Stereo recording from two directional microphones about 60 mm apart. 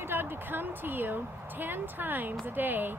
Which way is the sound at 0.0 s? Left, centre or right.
Right.